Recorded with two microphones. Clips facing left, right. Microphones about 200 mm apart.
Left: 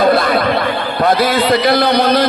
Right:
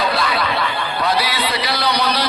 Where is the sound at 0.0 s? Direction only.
50° left (ahead or behind).